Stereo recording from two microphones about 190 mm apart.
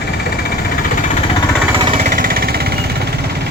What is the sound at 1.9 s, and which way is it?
Vehicle, 45° right (ahead or behind).